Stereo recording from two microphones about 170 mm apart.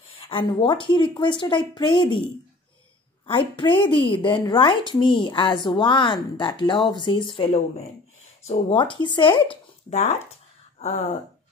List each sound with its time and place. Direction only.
0.2 s a woman's voice: 30° left (ahead or behind)
3.3 s a woman's voice: 30° left (ahead or behind)